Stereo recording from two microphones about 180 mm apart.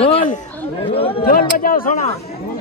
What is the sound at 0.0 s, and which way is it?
Chatter, 30° left (ahead or behind).